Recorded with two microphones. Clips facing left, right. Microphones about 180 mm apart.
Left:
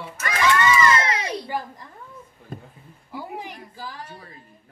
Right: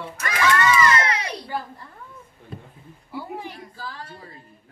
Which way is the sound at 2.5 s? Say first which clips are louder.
Left 2 dB; 45° left (ahead or behind).